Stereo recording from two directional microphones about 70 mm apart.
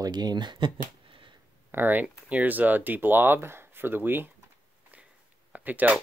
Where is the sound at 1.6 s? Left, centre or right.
Right.